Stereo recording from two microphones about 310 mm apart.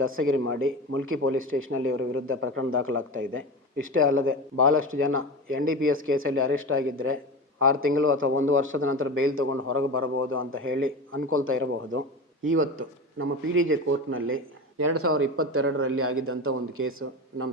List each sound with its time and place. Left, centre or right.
0.2 s a man's voice: right
7.9 s a man's voice: right